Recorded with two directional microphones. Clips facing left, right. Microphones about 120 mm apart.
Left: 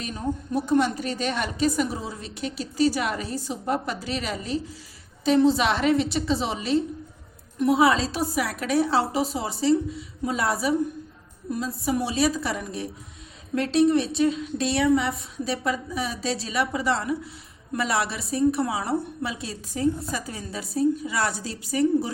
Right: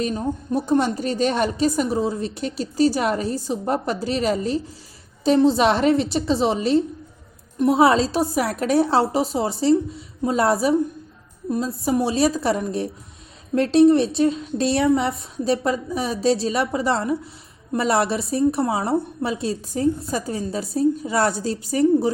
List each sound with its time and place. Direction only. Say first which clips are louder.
0.0 s a woman's voice: right 5 dB; 35° right (ahead or behind)